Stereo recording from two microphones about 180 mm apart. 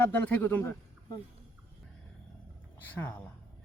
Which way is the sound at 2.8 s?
10° left (ahead or behind).